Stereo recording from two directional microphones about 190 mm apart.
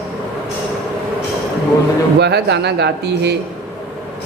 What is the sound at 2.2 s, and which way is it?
Speech, 65° right (ahead or behind).